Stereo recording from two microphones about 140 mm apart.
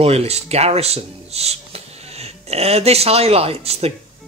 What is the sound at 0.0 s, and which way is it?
Speech, 45° right (ahead or behind).